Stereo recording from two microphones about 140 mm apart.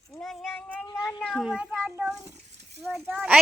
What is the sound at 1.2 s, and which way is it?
Speech, centre (ahead or behind).